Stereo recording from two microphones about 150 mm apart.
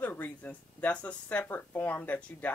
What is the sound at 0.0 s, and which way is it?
Speech, 10° left (ahead or behind).